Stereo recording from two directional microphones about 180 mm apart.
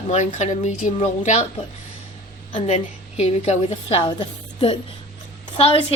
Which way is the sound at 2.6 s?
40° left (ahead or behind).